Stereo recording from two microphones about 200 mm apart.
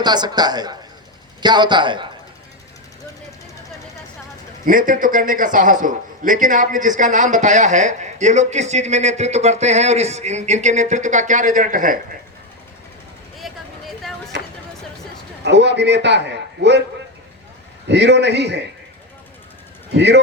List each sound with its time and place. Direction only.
0.0 s a man's voice: 20° right (ahead or behind)
4.6 s a man's voice: 40° right (ahead or behind)
13.4 s a sound: centre (ahead or behind)
15.4 s a man's voice: 60° right (ahead or behind)
17.8 s a man's voice: 60° right (ahead or behind)
19.9 s a man's voice: 60° right (ahead or behind)